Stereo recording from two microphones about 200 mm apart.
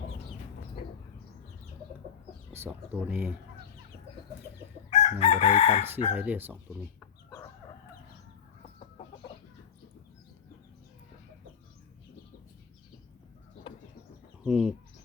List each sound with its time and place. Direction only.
2.5 s speech: 10° right (ahead or behind)
4.9 s chicken: 35° left (ahead or behind)
6.1 s speech: 10° right (ahead or behind)
14.4 s bird: 5° right (ahead or behind)